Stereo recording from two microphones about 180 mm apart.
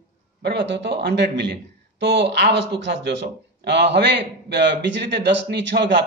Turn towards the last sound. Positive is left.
turn(degrees=-75)  # may be behind; listen again after turning